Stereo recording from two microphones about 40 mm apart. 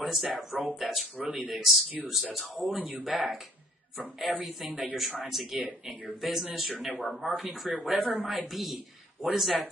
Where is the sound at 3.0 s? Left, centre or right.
Centre.